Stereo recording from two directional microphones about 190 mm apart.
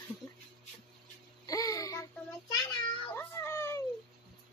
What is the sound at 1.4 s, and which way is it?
Music, 20° left (ahead or behind).